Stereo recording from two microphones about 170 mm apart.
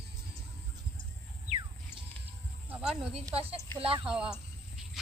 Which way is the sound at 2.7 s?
5° right (ahead or behind).